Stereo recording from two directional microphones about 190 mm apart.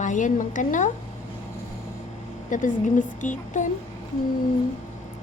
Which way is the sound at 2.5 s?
40° left (ahead or behind).